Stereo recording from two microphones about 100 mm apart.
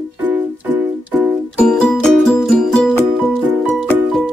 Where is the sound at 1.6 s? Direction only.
10° left (ahead or behind).